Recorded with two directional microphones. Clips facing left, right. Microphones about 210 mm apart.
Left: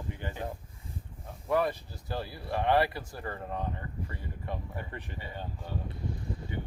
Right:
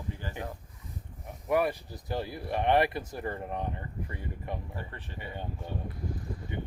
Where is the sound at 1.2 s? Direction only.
10° right (ahead or behind).